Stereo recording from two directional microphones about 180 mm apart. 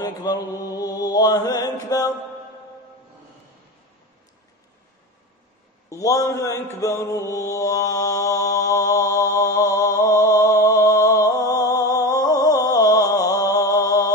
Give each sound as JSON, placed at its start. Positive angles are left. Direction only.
{"t": 0.0, "sound": "mantra", "side_deg": 20}
{"t": 5.9, "sound": "mantra", "side_deg": 20}